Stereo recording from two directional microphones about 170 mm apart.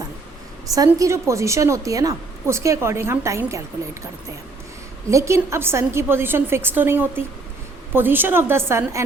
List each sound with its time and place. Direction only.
0.9 s a woman's voice: 15° right (ahead or behind)
5.1 s a woman's voice: 15° right (ahead or behind)